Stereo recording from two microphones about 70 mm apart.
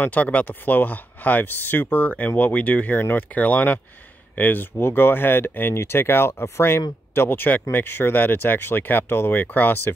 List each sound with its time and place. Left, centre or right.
0.0 s speech: left